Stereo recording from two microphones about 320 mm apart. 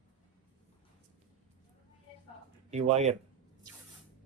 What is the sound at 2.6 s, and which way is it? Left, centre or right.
Speech, right.